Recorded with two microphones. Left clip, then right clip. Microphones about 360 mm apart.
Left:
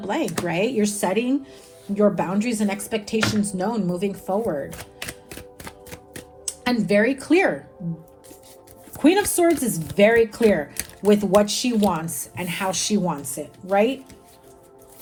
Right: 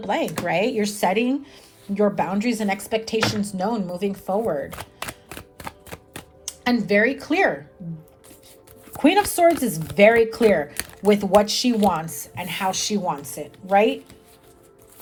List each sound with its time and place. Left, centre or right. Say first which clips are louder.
0.4 s speech: right 1 dB; centre
9.0 s speech: right 1 dB; right